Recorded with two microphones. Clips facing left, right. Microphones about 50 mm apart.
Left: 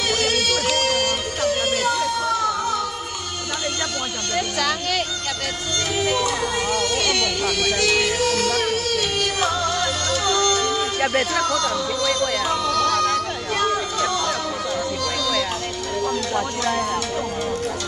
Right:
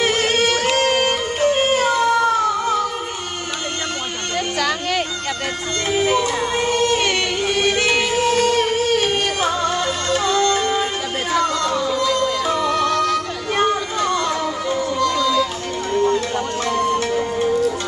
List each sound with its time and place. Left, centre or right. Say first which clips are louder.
0.0 s music: right 4 dB; right
4.6 s music: right 4 dB; centre
6.0 s music: right 2 dB; right
11.3 s a sound: right 3 dB; right
12.2 s music: right 3 dB; right
15.9 s a sound: right 7 dB; right
16.8 s music: right 5 dB; right